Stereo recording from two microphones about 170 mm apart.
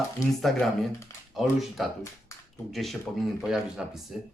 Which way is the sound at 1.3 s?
Centre (ahead or behind).